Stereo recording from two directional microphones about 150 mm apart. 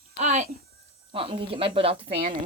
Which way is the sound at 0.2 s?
50° right (ahead or behind).